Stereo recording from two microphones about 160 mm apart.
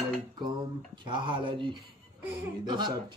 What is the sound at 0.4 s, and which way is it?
Speech, 30° right (ahead or behind).